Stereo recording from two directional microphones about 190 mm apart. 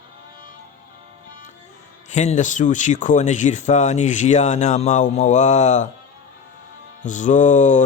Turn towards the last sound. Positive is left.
turn(degrees=40)  # may be behind; listen again after turning